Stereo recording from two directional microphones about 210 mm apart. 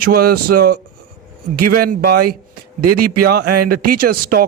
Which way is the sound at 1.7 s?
45° right (ahead or behind).